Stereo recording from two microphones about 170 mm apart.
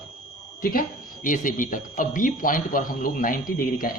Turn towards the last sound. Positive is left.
turn(degrees=55)  # may be behind; listen again after turning